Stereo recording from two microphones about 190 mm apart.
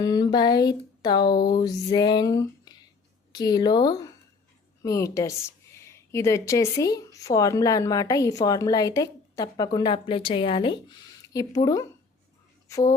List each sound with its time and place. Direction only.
0.0 s music: 20° left (ahead or behind)
3.3 s a woman's voice: 20° left (ahead or behind)
12.6 s a sound: 15° left (ahead or behind)